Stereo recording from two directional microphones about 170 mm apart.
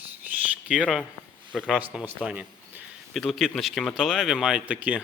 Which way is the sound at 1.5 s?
Centre (ahead or behind).